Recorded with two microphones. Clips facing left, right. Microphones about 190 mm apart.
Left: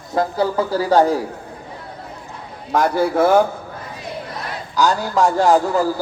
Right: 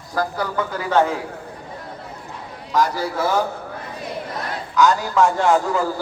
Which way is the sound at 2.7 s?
55° left (ahead or behind).